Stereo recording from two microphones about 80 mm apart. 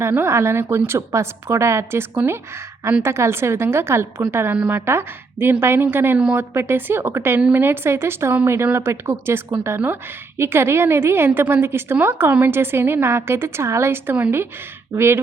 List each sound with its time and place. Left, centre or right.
0.1 s a woman's voice: right